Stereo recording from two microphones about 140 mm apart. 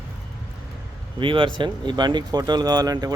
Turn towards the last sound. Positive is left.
turn(degrees=-25)  # may be behind; listen again after turning